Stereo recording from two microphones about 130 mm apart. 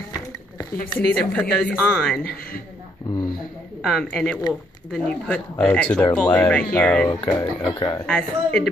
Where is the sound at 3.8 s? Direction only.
5° left (ahead or behind).